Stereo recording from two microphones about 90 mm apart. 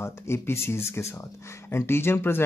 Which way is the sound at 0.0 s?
30° left (ahead or behind).